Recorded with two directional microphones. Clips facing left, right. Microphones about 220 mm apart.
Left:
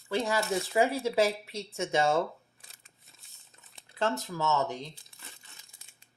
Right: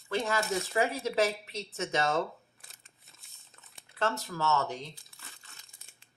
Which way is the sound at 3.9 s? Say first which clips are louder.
Left 2 dB; 15° left (ahead or behind).